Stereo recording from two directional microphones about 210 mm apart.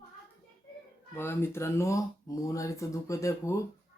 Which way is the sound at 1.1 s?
10° left (ahead or behind).